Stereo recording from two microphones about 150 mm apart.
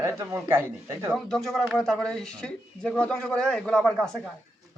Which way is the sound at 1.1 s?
Centre (ahead or behind).